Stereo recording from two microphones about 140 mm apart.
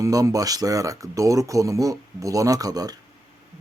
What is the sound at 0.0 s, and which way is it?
Speech, 25° right (ahead or behind).